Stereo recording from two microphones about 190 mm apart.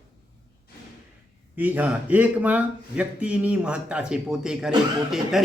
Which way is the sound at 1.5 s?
10° right (ahead or behind).